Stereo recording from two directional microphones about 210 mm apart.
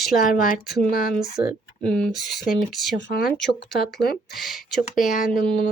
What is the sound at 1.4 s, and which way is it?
Speech, 25° right (ahead or behind).